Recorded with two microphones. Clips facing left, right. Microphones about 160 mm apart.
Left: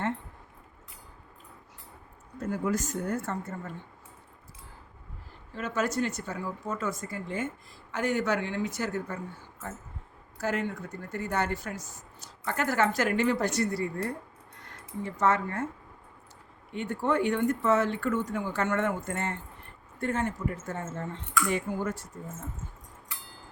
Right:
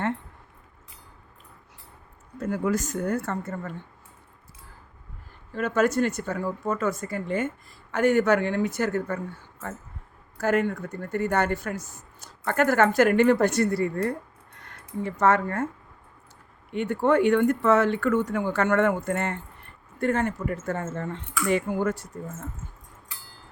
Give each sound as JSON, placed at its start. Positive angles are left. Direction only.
{"t": 2.4, "sound": "speech", "side_deg": -75}
{"t": 5.5, "sound": "speech", "side_deg": -55}
{"t": 10.3, "sound": "speech", "side_deg": -55}
{"t": 16.7, "sound": "speech", "side_deg": -65}